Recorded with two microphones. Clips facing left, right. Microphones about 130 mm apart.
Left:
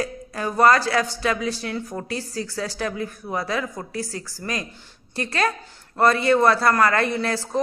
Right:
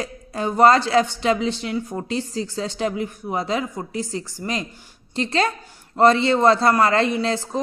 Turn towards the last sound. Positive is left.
turn(degrees=-20)  # may be behind; listen again after turning